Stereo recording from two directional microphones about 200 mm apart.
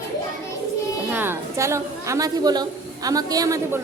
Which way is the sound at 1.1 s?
10° right (ahead or behind).